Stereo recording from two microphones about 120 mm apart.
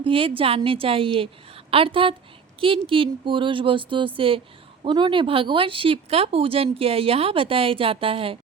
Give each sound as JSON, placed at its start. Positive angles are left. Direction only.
{"t": 0.0, "sound": "a woman's voice", "side_deg": -50}